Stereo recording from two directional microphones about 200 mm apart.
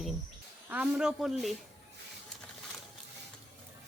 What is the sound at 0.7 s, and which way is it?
Speech, 5° right (ahead or behind).